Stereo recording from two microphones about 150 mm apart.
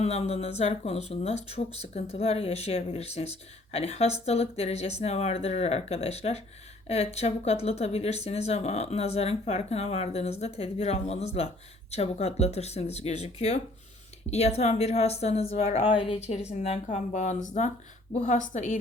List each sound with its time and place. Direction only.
0.0 s speech: 45° left (ahead or behind)
16.2 s speech: 45° left (ahead or behind)